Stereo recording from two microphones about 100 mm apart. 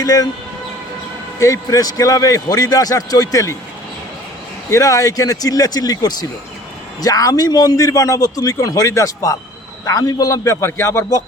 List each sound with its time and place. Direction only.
0.0 s speech: 40° left (ahead or behind)
1.4 s a man's voice: 35° left (ahead or behind)
4.7 s a man's voice: 35° left (ahead or behind)